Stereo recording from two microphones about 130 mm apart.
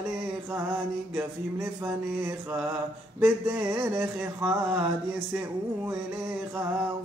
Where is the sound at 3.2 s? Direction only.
15° right (ahead or behind).